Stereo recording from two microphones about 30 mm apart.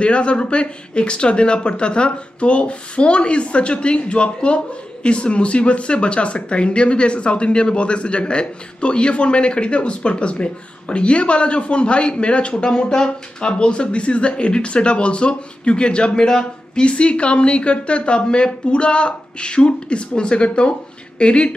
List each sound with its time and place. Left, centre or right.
0.0 s speech: left
16.8 s speech: left